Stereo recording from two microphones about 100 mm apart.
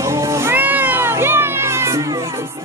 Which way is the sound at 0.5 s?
15° right (ahead or behind).